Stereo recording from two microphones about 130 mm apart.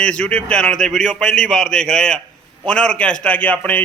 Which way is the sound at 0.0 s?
10° left (ahead or behind).